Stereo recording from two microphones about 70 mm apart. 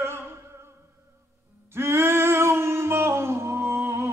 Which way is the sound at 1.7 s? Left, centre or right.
Right.